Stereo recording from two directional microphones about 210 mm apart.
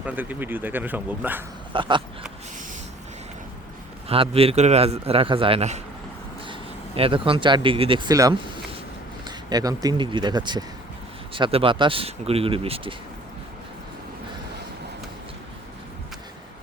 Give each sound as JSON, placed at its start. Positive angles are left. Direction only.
{"t": 0.0, "sound": "speech", "side_deg": -5}
{"t": 1.7, "sound": "a man's voice", "side_deg": -25}
{"t": 4.1, "sound": "a man's voice", "side_deg": -25}